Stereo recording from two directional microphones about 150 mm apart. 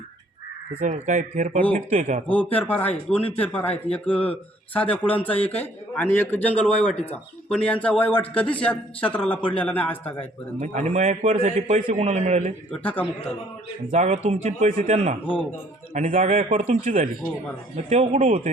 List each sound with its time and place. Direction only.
0.8 s speech: 55° right (ahead or behind)
2.3 s speech: 10° left (ahead or behind)
5.4 s a man's voice: 40° left (ahead or behind)
5.9 s speech: 15° left (ahead or behind)
10.6 s a man's voice: 55° right (ahead or behind)
12.7 s speech: 10° left (ahead or behind)
13.9 s a man's voice: 50° right (ahead or behind)
16.0 s speech: 60° right (ahead or behind)
16.6 s a man's voice: 50° right (ahead or behind)